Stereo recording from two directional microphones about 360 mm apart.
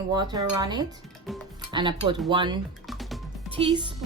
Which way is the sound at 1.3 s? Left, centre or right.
Centre.